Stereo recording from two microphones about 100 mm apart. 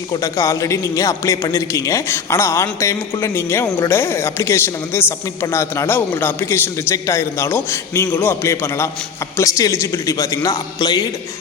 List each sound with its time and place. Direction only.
0.1 s a man's voice: 35° left (ahead or behind)